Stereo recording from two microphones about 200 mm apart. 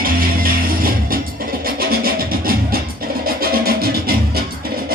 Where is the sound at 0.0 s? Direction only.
45° right (ahead or behind).